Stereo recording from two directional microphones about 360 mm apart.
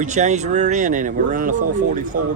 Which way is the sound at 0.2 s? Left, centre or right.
Centre.